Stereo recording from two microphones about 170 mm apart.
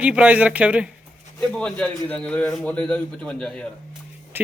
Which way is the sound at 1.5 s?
5° left (ahead or behind).